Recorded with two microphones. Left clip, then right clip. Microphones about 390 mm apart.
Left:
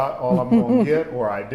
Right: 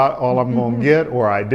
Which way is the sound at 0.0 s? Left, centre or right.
Right.